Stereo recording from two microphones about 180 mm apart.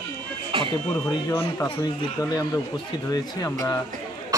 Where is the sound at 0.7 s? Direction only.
20° left (ahead or behind).